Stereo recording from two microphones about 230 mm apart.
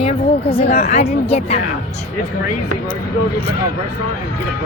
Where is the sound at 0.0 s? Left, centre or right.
Left.